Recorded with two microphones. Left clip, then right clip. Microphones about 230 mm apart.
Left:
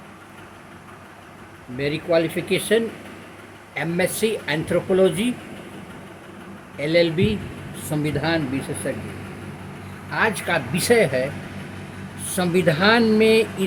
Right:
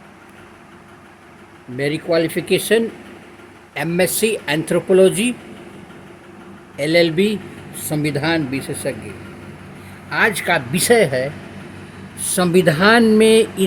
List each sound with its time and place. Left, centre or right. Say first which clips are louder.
1.8 s speech: right 3 dB; right
6.7 s speech: right 4 dB; right
10.1 s speech: right 5 dB; right
12.3 s speech: right 5 dB; right